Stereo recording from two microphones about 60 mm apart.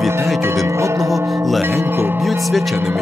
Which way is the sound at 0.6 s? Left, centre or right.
Right.